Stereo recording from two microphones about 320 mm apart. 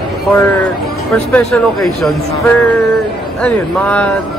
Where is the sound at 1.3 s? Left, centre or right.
Centre.